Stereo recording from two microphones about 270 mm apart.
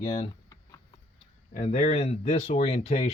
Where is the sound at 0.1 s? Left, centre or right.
Centre.